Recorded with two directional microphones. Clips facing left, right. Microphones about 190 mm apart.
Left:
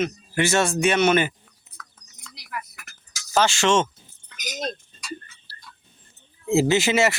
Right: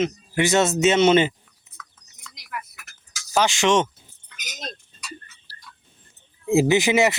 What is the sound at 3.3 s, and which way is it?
Speech, 15° right (ahead or behind).